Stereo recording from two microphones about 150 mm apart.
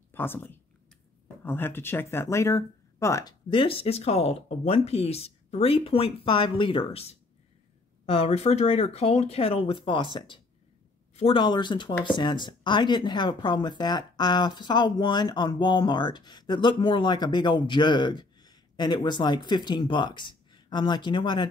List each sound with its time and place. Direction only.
0.1 s speech: 15° left (ahead or behind)
3.4 s speech: 35° left (ahead or behind)